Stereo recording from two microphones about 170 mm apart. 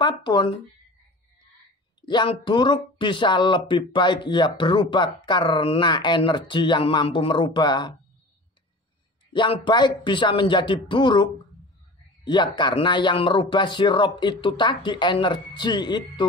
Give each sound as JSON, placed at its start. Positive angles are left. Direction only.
{"t": 0.0, "sound": "speech", "side_deg": 25}
{"t": 2.0, "sound": "speech", "side_deg": 25}
{"t": 9.3, "sound": "speech", "side_deg": 30}
{"t": 12.3, "sound": "speech", "side_deg": 25}